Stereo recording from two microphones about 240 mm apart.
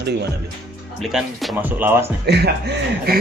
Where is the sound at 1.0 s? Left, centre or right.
Centre.